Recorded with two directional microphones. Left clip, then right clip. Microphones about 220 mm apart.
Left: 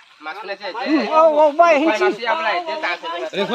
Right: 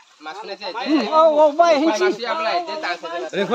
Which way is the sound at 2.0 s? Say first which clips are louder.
Left 2 dB; 45° right (ahead or behind).